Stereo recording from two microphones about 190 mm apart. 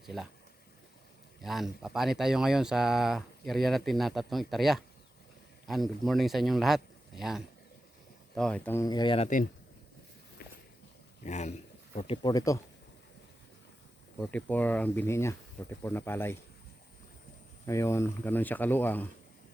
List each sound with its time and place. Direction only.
0.0 s speech: centre (ahead or behind)
1.4 s speech: centre (ahead or behind); by 9.3 s 30° left (ahead or behind)
11.2 s speech: 35° left (ahead or behind)
12.3 s speech: 20° left (ahead or behind)
14.2 s speech: 5° left (ahead or behind)
17.7 s speech: 15° left (ahead or behind)